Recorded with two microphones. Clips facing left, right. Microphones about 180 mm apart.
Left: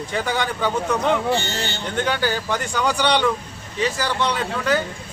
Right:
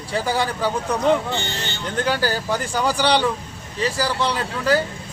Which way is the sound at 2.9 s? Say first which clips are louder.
Right 1 dB; 35° right (ahead or behind).